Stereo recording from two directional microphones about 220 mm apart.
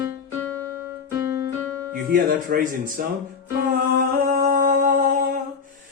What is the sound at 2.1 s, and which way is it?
Speech, 35° right (ahead or behind).